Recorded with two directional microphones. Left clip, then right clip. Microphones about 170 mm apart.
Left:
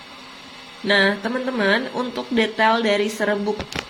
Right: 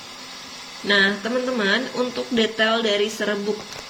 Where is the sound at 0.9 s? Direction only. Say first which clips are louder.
Left 1 dB; 35° left (ahead or behind).